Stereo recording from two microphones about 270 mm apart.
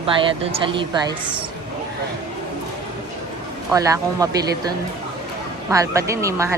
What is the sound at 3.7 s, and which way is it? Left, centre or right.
Speech, centre.